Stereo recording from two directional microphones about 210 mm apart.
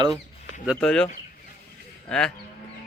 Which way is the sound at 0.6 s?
Centre (ahead or behind).